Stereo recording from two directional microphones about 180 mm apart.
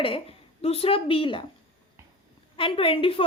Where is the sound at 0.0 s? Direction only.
30° left (ahead or behind).